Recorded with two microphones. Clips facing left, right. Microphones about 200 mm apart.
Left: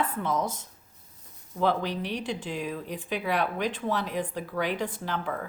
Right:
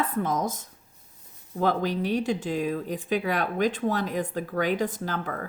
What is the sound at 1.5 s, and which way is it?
Speech, 45° right (ahead or behind).